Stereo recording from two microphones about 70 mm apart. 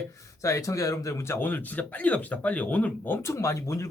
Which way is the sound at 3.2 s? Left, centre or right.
Left.